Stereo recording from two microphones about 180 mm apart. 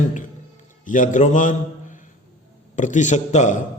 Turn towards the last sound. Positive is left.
turn(degrees=40)  # may be behind; listen again after turning